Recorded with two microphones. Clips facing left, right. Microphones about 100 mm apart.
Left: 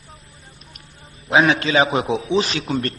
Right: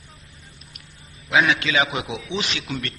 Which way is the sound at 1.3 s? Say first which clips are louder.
Left 4 dB; 35° left (ahead or behind).